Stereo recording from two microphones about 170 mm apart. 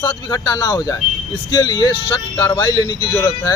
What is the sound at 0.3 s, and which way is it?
A man's voice, 25° left (ahead or behind).